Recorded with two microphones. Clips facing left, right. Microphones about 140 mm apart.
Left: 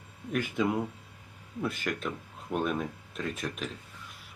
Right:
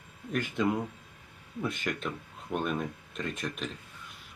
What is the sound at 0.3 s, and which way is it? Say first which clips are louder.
Speech: even; 5° left (ahead or behind).